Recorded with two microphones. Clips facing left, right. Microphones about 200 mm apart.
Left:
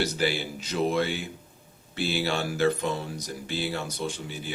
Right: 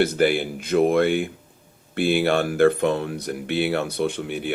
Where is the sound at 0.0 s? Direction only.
55° right (ahead or behind).